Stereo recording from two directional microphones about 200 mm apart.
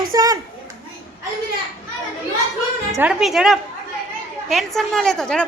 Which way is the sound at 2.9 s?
5° right (ahead or behind).